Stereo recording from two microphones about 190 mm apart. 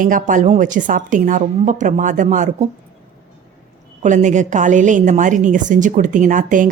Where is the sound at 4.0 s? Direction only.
40° right (ahead or behind).